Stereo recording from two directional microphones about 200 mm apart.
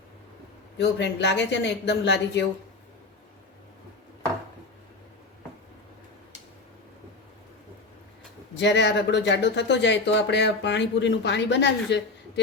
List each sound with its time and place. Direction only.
0.8 s speech: 60° left (ahead or behind)
8.5 s speech: 60° left (ahead or behind)